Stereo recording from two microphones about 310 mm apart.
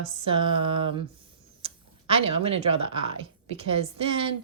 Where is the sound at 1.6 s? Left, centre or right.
Centre.